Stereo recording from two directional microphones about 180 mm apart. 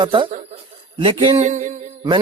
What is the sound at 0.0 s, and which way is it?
A man's voice, 30° right (ahead or behind).